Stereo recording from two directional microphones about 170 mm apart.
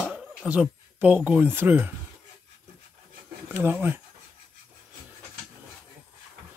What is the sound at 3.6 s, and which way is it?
Speech, 10° right (ahead or behind).